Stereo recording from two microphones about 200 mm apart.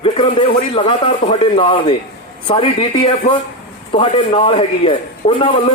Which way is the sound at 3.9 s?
25° left (ahead or behind).